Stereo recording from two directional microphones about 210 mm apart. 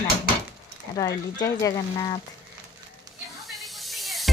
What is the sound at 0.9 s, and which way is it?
Speech, 15° left (ahead or behind).